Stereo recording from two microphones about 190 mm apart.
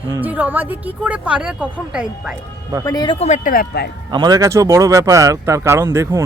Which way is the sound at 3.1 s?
35° left (ahead or behind).